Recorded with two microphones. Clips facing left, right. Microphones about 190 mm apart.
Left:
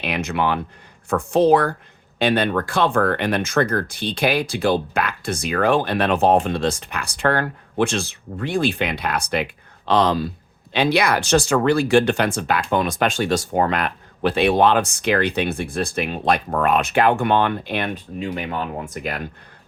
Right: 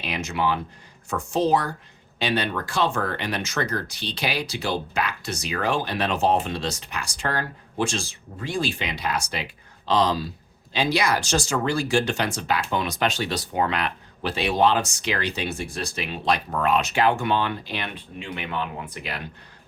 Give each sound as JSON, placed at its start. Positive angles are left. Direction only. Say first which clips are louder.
{"t": 0.0, "sound": "speech", "louder": "left 4 dB", "side_deg": 60}